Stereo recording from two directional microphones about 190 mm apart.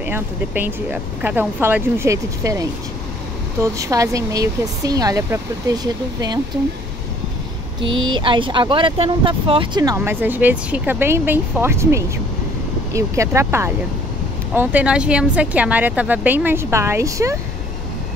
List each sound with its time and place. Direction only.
0.0 s speech: 10° right (ahead or behind)
3.7 s speech: 15° right (ahead or behind)
8.1 s speech: 25° right (ahead or behind)